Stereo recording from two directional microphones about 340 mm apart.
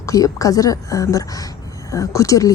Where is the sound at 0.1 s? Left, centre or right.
Centre.